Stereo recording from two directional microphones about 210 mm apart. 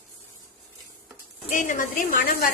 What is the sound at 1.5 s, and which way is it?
Speech, 40° left (ahead or behind).